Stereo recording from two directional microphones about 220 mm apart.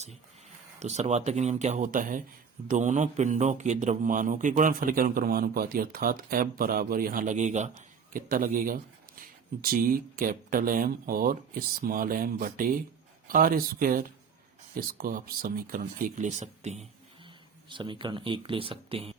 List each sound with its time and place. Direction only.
0.8 s a man's voice: 30° right (ahead or behind)